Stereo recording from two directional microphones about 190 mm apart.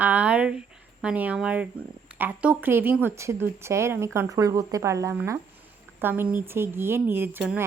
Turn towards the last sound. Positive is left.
turn(degrees=-10)  # may be behind; listen again after turning